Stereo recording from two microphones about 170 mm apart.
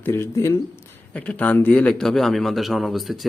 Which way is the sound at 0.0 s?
15° left (ahead or behind).